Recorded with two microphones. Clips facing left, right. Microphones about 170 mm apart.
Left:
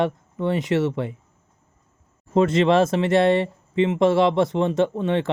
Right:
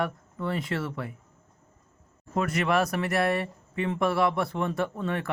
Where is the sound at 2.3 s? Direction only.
25° left (ahead or behind).